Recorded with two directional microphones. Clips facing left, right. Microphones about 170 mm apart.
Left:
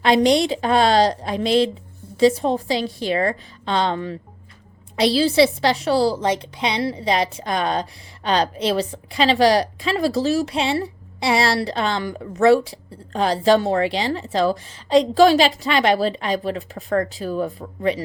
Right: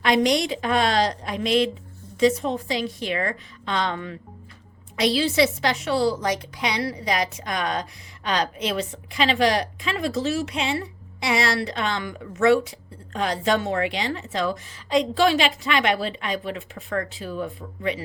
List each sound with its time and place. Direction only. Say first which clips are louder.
0.0 s a woman's voice: left 4 dB; 30° left (ahead or behind)